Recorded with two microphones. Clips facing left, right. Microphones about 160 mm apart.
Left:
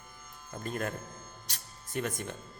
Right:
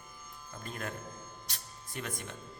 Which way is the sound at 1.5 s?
45° left (ahead or behind).